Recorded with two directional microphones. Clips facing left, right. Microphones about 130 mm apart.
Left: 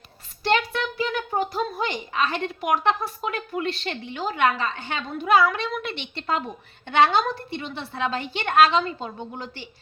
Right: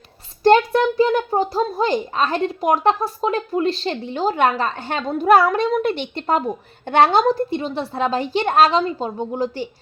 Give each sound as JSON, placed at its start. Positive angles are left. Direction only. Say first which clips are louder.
{"t": 0.4, "sound": "a woman's voice", "louder": "right 10 dB", "side_deg": -45}